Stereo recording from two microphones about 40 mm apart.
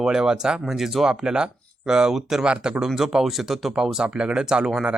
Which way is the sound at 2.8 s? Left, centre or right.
Centre.